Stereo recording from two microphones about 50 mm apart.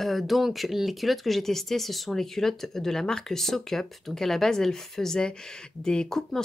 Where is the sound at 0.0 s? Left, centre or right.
Centre.